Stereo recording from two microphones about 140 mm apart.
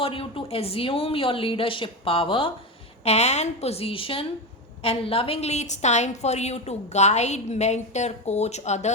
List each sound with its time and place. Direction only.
0.0 s speech: 40° left (ahead or behind)
3.0 s a woman's voice: 50° left (ahead or behind)